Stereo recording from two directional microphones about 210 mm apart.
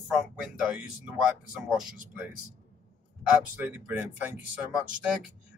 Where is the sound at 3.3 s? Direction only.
10° right (ahead or behind).